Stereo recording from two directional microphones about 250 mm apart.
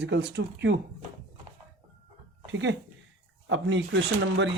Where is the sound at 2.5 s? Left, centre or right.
Right.